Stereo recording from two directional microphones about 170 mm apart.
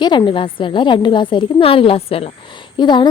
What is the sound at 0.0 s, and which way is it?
A woman's voice, 25° left (ahead or behind).